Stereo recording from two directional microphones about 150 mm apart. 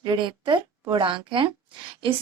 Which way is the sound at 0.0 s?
30° right (ahead or behind).